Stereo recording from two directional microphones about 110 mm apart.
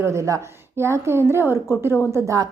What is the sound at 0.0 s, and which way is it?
A woman's voice, 30° right (ahead or behind).